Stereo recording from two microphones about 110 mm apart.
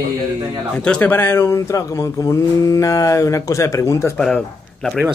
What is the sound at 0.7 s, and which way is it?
Speech, 10° left (ahead or behind).